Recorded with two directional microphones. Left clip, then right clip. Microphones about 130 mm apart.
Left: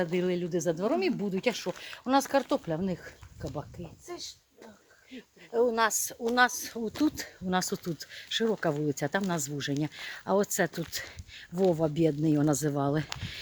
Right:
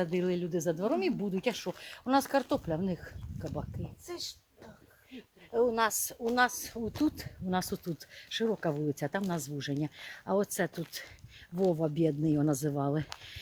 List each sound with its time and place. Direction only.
0.0 s speech: 5° left (ahead or behind)
4.0 s speech: 20° right (ahead or behind)
5.1 s speech: 5° left (ahead or behind); by 13.4 s 25° left (ahead or behind)